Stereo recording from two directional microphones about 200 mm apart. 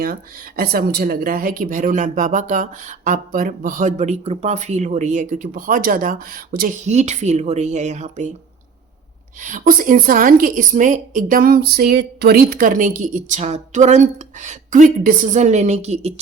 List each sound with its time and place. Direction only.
0.0 s speech: 50° right (ahead or behind)
6.8 s a woman's voice: 35° right (ahead or behind)
9.4 s a woman's voice: 40° right (ahead or behind)